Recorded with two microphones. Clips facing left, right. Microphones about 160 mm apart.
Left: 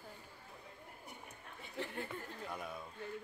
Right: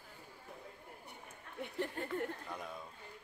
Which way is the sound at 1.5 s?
60° right (ahead or behind).